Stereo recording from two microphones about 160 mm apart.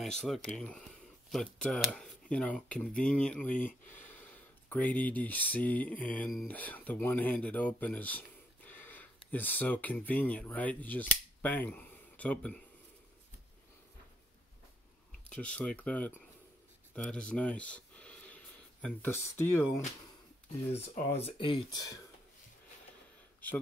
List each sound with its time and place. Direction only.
0.0 s speech: centre (ahead or behind)
3.0 s mantra: 5° left (ahead or behind)
4.6 s mantra: 10° left (ahead or behind)
8.6 s speech: 10° left (ahead or behind)
15.2 s mantra: 5° left (ahead or behind)
16.9 s speech: 5° left (ahead or behind)
21.2 s speech: 35° left (ahead or behind)